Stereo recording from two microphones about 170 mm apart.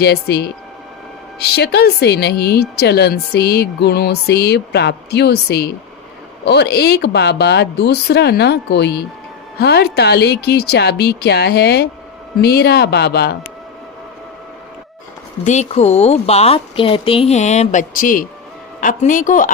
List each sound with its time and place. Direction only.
0.0 s a woman's voice: 75° left (ahead or behind)
9.6 s a woman's voice: 70° left (ahead or behind)
15.4 s a woman's voice: 40° left (ahead or behind)